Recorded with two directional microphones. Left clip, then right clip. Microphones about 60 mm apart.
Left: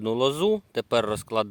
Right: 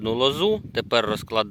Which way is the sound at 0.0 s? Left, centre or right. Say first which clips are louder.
Right 2 dB; centre.